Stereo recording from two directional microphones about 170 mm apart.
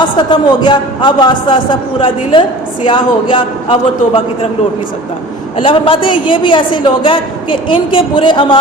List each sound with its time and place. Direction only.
0.2 s a woman's voice: 25° left (ahead or behind)
5.6 s a woman's voice: 30° left (ahead or behind)